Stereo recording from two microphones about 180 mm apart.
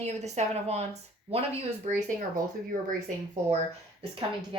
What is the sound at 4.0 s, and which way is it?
Speech, 30° right (ahead or behind).